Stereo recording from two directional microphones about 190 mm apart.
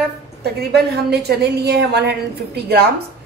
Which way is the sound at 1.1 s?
60° right (ahead or behind).